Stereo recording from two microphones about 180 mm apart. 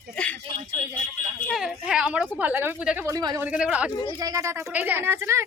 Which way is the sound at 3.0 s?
20° right (ahead or behind).